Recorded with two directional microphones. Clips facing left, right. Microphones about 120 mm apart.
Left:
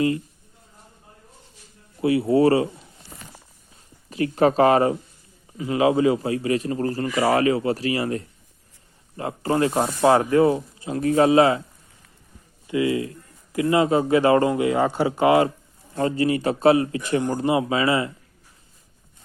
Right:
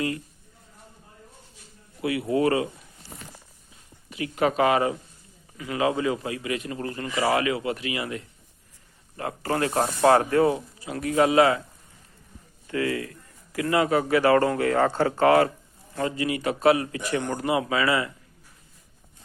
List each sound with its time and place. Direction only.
2.0 s a man's voice: 30° left (ahead or behind)
4.1 s a man's voice: 35° left (ahead or behind)
5.5 s a man's voice: 25° left (ahead or behind)
9.1 s a man's voice: 25° left (ahead or behind)
12.6 s a man's voice: 15° left (ahead or behind)
16.0 s a man's voice: 35° left (ahead or behind)